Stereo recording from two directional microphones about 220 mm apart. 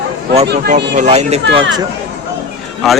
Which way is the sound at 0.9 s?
30° right (ahead or behind).